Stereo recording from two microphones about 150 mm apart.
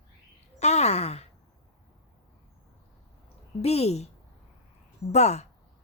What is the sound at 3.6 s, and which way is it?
Speech, 45° left (ahead or behind).